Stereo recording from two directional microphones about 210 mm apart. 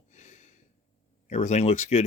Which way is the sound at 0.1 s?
35° left (ahead or behind).